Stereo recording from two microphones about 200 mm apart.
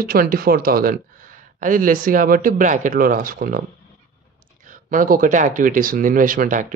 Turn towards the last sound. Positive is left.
turn(degrees=-40)  # may be behind; listen again after turning